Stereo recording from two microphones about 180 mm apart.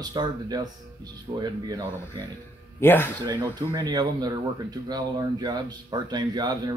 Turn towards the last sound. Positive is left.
turn(degrees=-25)  # may be behind; listen again after turning